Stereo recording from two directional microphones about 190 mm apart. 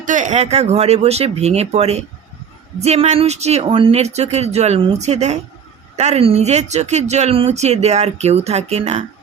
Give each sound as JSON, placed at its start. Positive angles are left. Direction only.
{"t": 0.0, "sound": "speech", "side_deg": -40}